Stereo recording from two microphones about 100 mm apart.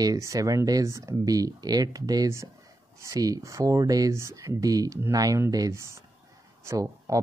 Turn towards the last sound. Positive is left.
turn(degrees=-35)  # may be behind; listen again after turning